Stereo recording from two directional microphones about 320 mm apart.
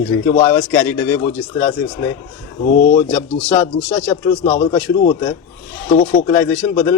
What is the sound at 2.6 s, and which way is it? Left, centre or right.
Speech, left.